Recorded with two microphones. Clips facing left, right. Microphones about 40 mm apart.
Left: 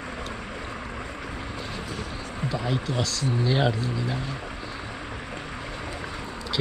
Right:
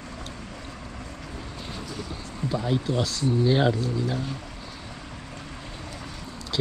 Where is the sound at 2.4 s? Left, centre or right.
Left.